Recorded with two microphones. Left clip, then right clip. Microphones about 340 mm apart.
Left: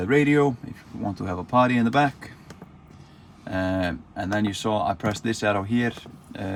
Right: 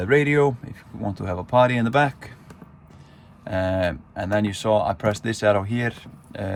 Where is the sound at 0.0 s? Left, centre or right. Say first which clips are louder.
Right 2 dB; right.